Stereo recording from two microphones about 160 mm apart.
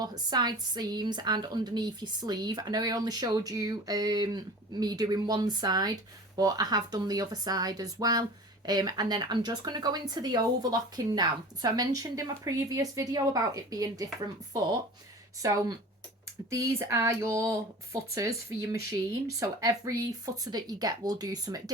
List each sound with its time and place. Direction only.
0.0 s a woman's voice: 25° right (ahead or behind)
15.4 s a woman's voice: 20° right (ahead or behind)